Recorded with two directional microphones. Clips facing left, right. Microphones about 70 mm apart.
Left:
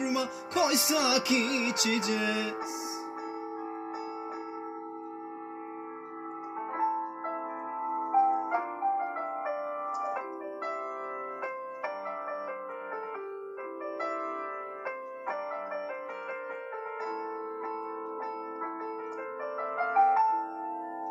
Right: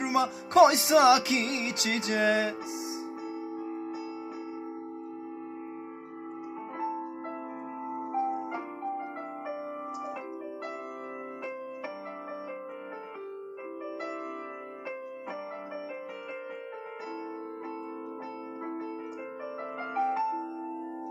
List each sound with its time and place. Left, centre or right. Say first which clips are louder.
0.0 s music: right 3 dB; right
6.8 s music: left 4 dB; left
14.9 s piano: left 2 dB; left
19.6 s music: left 6 dB; left